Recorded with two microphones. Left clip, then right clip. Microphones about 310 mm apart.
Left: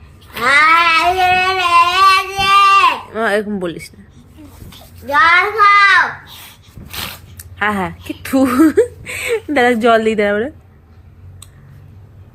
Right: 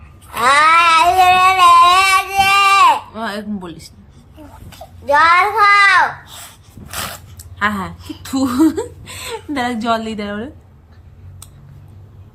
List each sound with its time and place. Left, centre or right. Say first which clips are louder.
0.5 s child singing: even; right
3.2 s a woman's voice: left 8 dB; centre
5.0 s a child's voice: even; centre
7.3 s a woman's voice: left 2 dB; centre